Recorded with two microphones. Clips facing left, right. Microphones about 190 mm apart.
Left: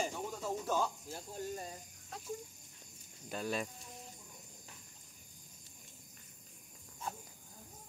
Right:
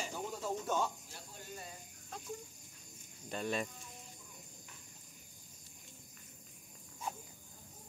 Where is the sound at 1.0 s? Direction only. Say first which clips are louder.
Left 9 dB; 40° left (ahead or behind).